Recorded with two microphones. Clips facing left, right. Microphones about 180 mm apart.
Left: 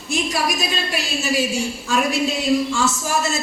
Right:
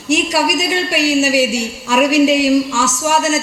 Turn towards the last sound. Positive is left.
turn(degrees=-80)